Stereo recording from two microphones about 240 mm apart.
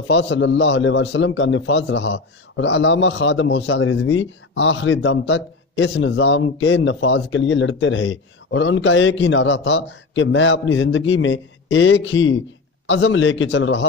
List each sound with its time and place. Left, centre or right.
0.0 s a man's voice: left